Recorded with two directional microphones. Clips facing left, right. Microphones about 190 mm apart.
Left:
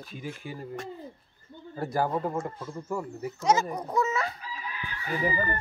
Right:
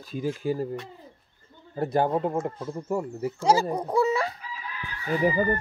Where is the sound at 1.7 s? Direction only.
20° right (ahead or behind).